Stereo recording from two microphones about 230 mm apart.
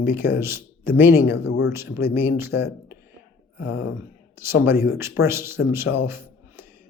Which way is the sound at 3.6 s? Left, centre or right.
Left.